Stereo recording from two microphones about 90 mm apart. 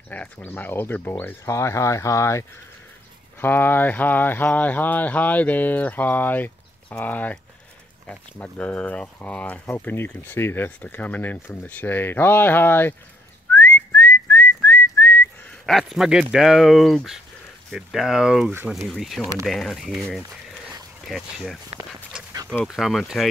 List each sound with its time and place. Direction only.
0.1 s speech: 20° left (ahead or behind)
1.4 s speech: 35° left (ahead or behind)
3.3 s speech: 25° left (ahead or behind)
13.5 s whistling: 25° left (ahead or behind)
15.8 s speech: 5° right (ahead or behind)
22.7 s speech: centre (ahead or behind)